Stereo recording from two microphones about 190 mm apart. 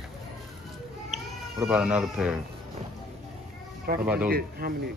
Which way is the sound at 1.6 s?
5° right (ahead or behind).